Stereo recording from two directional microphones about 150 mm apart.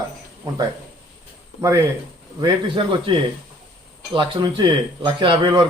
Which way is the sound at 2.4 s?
35° right (ahead or behind).